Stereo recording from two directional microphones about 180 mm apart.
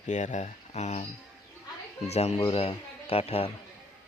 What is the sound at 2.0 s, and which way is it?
Speech, 35° left (ahead or behind).